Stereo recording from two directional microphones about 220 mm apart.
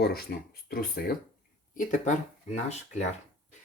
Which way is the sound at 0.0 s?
45° left (ahead or behind).